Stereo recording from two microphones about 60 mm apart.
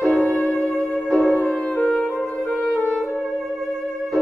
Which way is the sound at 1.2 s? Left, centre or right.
Left.